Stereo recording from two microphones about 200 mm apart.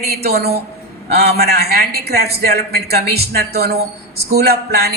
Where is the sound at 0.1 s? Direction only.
50° right (ahead or behind).